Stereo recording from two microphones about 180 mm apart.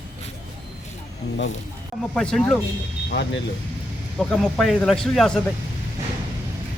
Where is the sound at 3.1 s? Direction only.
80° left.